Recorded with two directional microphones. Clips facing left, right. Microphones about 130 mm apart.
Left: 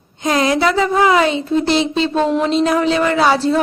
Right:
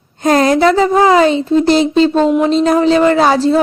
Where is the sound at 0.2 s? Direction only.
45° right (ahead or behind).